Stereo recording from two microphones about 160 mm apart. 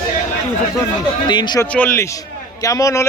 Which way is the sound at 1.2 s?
25° left (ahead or behind).